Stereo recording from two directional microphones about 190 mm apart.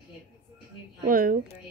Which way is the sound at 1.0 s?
45° right (ahead or behind).